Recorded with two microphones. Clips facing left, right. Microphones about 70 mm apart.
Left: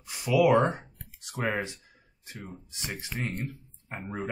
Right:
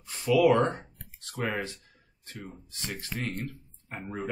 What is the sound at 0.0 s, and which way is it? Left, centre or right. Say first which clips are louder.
Speech: right 1 dB; centre.